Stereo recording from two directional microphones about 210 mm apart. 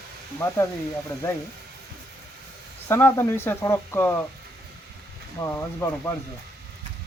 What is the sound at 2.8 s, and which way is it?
Speech, 10° left (ahead or behind).